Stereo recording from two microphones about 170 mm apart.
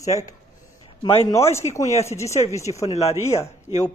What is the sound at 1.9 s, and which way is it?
Speech, 40° left (ahead or behind).